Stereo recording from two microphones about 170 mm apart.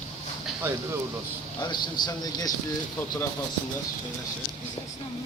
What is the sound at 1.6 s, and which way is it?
Speech, 25° left (ahead or behind).